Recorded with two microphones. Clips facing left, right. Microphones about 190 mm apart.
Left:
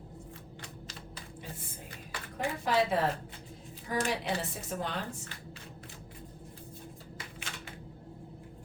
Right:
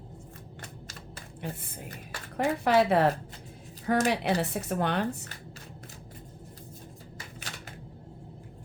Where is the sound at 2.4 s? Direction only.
70° right (ahead or behind).